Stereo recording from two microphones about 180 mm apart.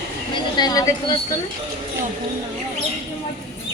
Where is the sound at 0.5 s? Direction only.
20° left (ahead or behind).